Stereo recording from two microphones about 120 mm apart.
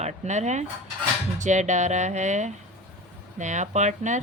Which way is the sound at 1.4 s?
90° right.